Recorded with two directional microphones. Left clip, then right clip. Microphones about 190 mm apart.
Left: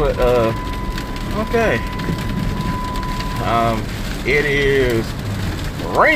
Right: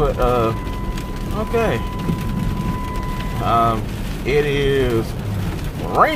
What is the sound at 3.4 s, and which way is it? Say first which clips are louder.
Speech: right 1 dB; 5° right (ahead or behind).